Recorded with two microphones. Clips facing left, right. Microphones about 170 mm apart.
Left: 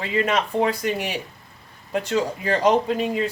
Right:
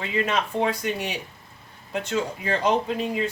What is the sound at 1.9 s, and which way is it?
Speech, 35° left (ahead or behind).